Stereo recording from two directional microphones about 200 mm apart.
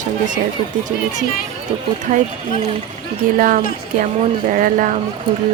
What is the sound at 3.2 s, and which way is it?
Speech, 40° right (ahead or behind).